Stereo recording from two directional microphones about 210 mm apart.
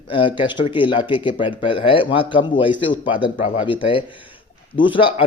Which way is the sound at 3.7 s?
25° left (ahead or behind).